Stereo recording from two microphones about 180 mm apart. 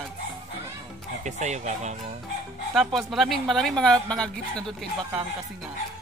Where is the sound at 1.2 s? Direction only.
40° right (ahead or behind).